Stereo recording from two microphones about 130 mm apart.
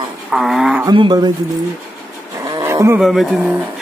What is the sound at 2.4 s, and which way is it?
Roaring cats, 20° right (ahead or behind).